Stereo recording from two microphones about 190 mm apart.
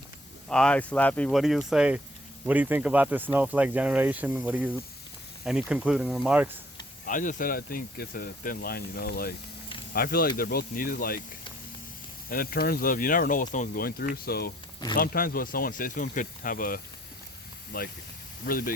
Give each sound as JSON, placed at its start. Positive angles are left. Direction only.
{"t": 0.4, "sound": "speech", "side_deg": 5}
{"t": 7.0, "sound": "speech", "side_deg": 45}
{"t": 12.3, "sound": "speech", "side_deg": 50}